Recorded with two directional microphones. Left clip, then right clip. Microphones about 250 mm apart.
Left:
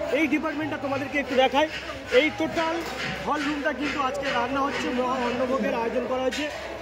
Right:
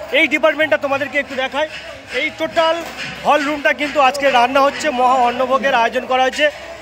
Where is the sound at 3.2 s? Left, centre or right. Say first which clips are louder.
Right 13 dB; right.